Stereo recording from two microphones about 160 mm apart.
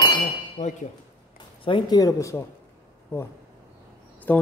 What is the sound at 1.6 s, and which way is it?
Speech, 30° left (ahead or behind).